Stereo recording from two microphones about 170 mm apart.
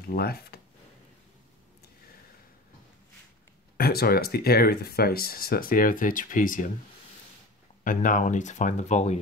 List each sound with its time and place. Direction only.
0.1 s speech: 65° left (ahead or behind)
3.7 s speech: 65° left (ahead or behind)
7.8 s speech: 50° left (ahead or behind)